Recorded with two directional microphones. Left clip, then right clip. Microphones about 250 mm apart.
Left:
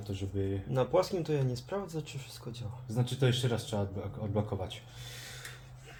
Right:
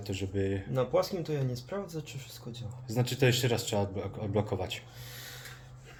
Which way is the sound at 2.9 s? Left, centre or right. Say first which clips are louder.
Right 4 dB; right.